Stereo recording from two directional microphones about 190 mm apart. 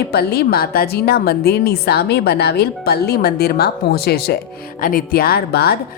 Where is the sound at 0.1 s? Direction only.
55° left (ahead or behind).